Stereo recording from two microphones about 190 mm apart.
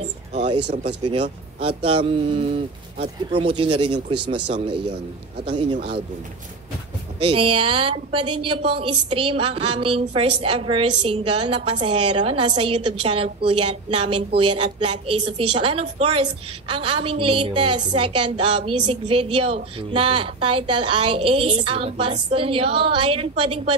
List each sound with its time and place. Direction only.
1.6 s a woman's voice: 30° right (ahead or behind)
7.2 s a woman's voice: 30° right (ahead or behind)